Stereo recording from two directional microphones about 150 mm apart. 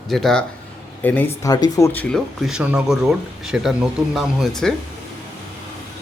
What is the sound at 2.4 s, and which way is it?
Speech, 5° right (ahead or behind).